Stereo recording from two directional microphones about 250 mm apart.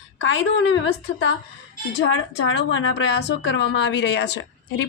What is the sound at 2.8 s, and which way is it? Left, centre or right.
A woman's voice, left.